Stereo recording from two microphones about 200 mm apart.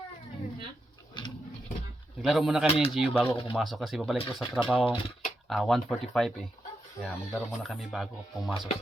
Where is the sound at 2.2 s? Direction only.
Centre (ahead or behind).